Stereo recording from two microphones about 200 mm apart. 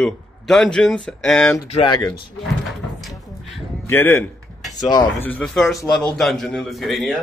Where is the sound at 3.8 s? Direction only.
10° left (ahead or behind).